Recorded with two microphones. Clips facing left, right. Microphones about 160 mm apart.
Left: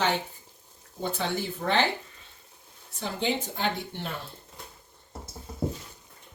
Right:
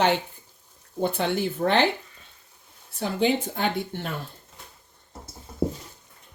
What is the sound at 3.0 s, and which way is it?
Speech, 60° right (ahead or behind).